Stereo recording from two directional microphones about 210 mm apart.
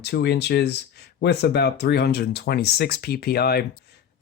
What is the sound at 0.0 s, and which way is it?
Speech, 50° left (ahead or behind).